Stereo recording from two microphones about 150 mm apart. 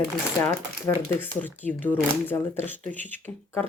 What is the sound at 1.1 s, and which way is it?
Speech, 15° left (ahead or behind).